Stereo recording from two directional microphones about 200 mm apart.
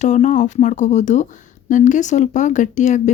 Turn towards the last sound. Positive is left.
turn(degrees=35)  # may be behind; listen again after turning